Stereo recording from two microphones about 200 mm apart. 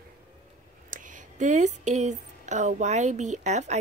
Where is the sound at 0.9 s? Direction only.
40° right (ahead or behind).